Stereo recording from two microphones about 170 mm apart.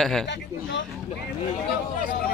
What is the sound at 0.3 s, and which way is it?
Speech, 90° left.